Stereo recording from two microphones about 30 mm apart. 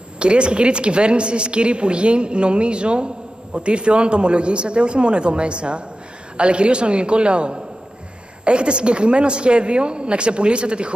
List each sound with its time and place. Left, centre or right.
0.2 s a woman's voice: right